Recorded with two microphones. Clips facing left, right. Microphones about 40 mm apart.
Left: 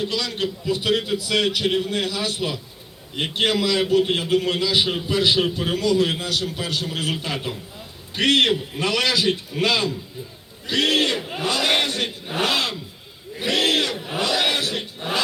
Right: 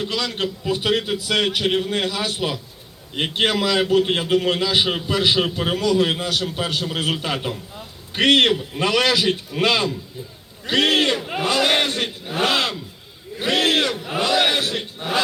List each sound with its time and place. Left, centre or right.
0.0 s a man's voice: right